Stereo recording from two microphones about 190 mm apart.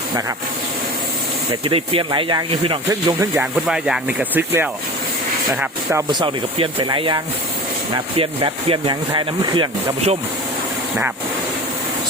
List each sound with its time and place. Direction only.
1.6 s speech: 30° right (ahead or behind)
2.9 s speech: 15° right (ahead or behind)
3.4 s speech: 5° right (ahead or behind); by 10.2 s 30° right (ahead or behind)